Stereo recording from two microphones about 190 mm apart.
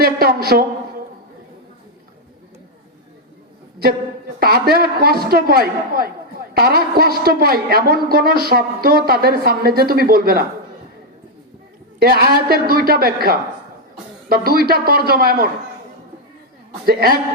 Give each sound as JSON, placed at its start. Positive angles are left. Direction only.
{"t": 0.0, "sound": "a woman's voice", "side_deg": -55}
{"t": 4.4, "sound": "a man's voice", "side_deg": -55}
{"t": 11.9, "sound": "a man's voice", "side_deg": -55}
{"t": 16.8, "sound": "a man's voice", "side_deg": -55}